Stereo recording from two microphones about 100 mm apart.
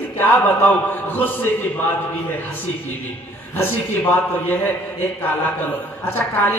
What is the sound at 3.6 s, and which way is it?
A woman's voice, 20° left (ahead or behind).